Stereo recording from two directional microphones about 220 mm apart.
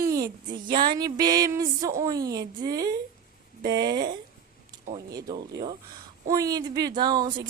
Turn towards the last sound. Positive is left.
turn(degrees=-20)  # may be behind; listen again after turning